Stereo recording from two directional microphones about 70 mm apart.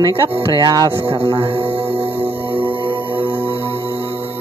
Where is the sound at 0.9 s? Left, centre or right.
Right.